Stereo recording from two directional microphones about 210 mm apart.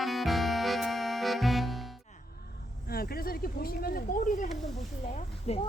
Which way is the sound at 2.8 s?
45° left (ahead or behind).